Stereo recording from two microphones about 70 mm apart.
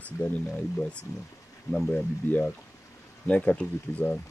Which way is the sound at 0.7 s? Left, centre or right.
Centre.